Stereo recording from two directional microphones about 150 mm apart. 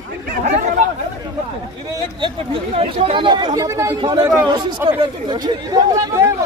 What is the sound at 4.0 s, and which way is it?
Speech, 25° right (ahead or behind).